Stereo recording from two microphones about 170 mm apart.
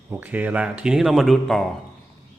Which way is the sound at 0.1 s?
10° right (ahead or behind).